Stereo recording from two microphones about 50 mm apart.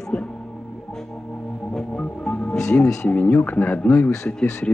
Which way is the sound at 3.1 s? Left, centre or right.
Left.